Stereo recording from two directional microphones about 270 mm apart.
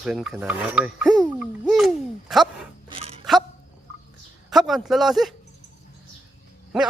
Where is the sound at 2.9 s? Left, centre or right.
Right.